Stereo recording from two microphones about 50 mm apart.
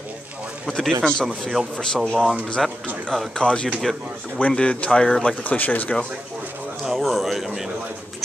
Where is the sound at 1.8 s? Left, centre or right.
Centre.